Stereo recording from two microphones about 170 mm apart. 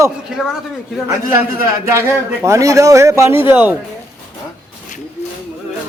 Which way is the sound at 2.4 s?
20° right (ahead or behind).